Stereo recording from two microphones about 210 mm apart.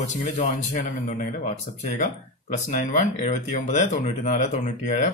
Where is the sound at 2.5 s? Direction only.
35° left (ahead or behind).